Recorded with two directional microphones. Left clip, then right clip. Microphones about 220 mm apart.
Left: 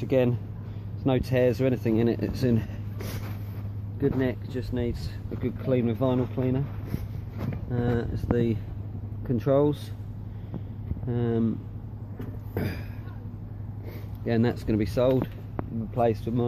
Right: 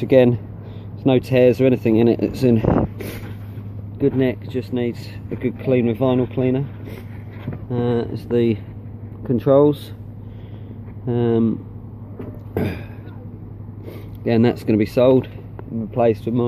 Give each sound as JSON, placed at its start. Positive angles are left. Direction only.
{"t": 0.0, "sound": "speech", "side_deg": -30}
{"t": 7.7, "sound": "speech", "side_deg": -30}
{"t": 9.3, "sound": "speech", "side_deg": -15}
{"t": 11.1, "sound": "speech", "side_deg": -25}
{"t": 12.5, "sound": "speech", "side_deg": -25}
{"t": 14.2, "sound": "speech", "side_deg": -30}